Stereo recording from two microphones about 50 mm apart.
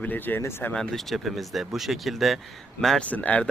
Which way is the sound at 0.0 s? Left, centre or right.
Left.